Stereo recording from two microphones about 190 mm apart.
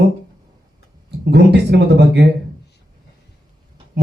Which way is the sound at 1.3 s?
60° right (ahead or behind).